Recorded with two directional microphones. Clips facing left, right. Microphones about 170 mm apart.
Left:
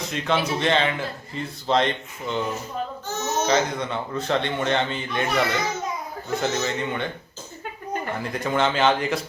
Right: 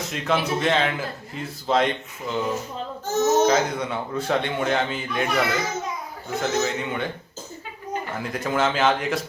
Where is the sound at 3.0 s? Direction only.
45° right (ahead or behind).